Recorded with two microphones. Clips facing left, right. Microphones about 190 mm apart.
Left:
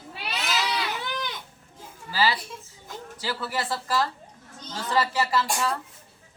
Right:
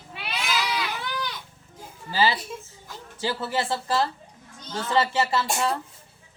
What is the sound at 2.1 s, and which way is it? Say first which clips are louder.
A woman's voice: right 2 dB; 20° right (ahead or behind).